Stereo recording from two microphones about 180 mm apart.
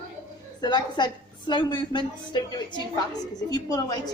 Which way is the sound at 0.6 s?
25° left (ahead or behind).